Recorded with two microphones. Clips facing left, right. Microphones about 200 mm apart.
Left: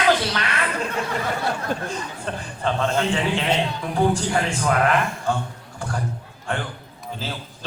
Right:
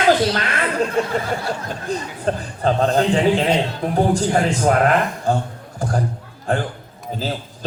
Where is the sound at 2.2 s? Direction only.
35° right (ahead or behind).